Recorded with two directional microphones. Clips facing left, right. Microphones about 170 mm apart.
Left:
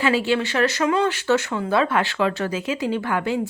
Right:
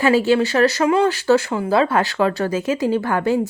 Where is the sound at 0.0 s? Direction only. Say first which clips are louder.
Right 5 dB; 40° right (ahead or behind).